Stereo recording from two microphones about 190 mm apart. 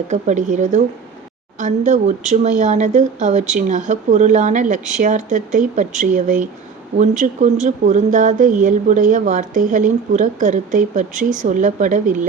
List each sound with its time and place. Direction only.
0.1 s speech: 40° right (ahead or behind)